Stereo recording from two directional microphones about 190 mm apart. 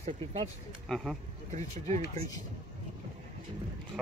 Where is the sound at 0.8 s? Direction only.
Centre (ahead or behind).